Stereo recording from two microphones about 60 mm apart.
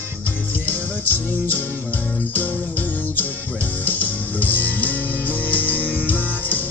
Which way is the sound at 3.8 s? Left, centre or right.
Left.